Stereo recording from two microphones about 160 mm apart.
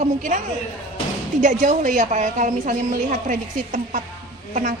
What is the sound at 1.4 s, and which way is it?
A woman's voice, 50° right (ahead or behind).